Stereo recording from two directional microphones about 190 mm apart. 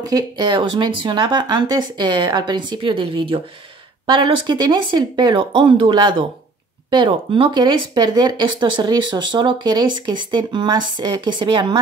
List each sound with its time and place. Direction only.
0.0 s speech: 20° right (ahead or behind)